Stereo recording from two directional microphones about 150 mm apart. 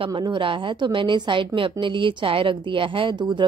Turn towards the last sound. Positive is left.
turn(degrees=-30)  # may be behind; listen again after turning